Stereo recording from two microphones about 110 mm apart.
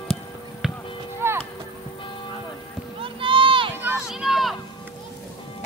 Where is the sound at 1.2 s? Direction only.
20° right (ahead or behind).